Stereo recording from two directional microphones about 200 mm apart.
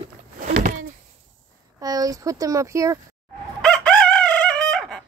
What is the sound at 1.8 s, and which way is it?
Speech, 20° right (ahead or behind).